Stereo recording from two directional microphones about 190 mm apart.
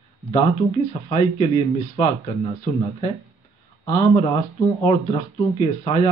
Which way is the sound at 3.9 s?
25° left (ahead or behind).